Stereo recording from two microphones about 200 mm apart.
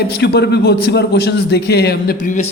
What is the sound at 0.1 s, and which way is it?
A man's voice, 55° left (ahead or behind).